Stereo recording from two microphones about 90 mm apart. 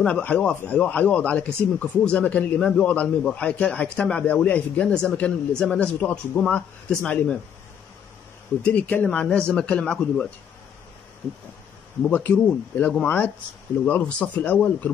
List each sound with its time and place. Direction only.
0.0 s a man's voice: 15° left (ahead or behind)
8.6 s a man's voice: 20° left (ahead or behind)
12.1 s a man's voice: 20° left (ahead or behind)